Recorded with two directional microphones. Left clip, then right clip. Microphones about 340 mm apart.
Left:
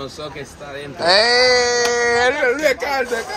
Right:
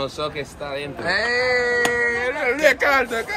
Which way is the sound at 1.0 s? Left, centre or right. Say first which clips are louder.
Left 8 dB; centre.